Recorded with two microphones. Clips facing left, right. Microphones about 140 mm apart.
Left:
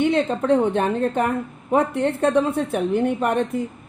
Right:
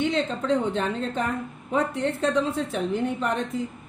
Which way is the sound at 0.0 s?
55° left (ahead or behind).